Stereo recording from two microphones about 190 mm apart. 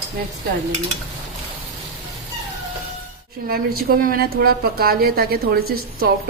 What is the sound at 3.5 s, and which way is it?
A woman's voice, 50° right (ahead or behind).